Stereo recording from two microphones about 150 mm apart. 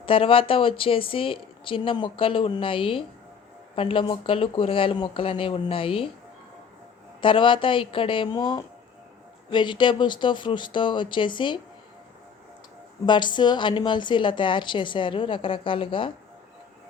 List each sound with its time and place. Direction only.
0.0 s a woman's voice: 35° left (ahead or behind)
7.2 s a woman's voice: 35° left (ahead or behind)
13.1 s a woman's voice: 30° left (ahead or behind)